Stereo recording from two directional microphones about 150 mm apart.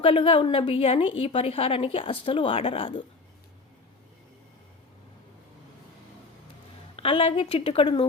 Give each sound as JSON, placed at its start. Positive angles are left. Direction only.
{"t": 0.0, "sound": "a woman's voice", "side_deg": 35}
{"t": 6.9, "sound": "a woman's voice", "side_deg": 40}